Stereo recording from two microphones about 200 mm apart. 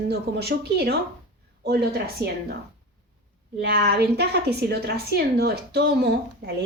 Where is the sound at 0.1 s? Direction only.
55° right (ahead or behind).